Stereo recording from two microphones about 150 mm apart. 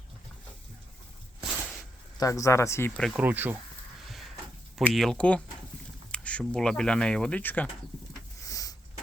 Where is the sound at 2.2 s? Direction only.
20° left (ahead or behind).